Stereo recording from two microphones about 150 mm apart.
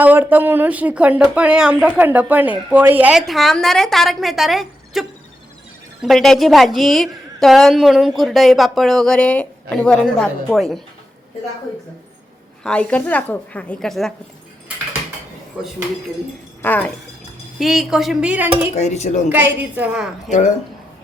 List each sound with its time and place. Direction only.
0.0 s speech: 10° right (ahead or behind)
12.6 s a woman's voice: 5° left (ahead or behind)
16.6 s a woman's voice: 10° left (ahead or behind)
17.6 s speech: centre (ahead or behind)
18.7 s speech: 50° left (ahead or behind)
19.3 s speech: 10° right (ahead or behind)